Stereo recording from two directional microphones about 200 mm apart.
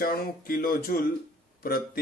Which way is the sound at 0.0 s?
45° left (ahead or behind).